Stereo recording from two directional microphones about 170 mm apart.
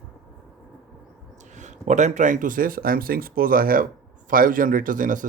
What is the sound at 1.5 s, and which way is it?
Speech, 45° right (ahead or behind).